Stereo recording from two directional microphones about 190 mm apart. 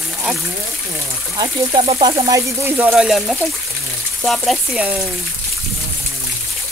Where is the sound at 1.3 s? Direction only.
30° right (ahead or behind).